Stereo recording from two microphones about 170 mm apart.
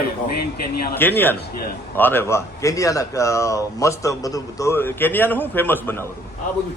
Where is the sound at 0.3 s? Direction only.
65° left (ahead or behind).